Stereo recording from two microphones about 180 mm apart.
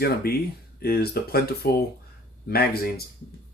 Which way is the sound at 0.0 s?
60° left (ahead or behind).